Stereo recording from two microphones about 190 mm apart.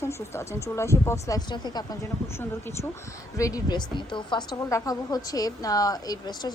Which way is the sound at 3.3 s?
15° left (ahead or behind).